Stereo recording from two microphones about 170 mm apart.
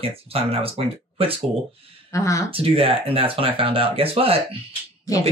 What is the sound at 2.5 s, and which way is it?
Speech, 35° right (ahead or behind).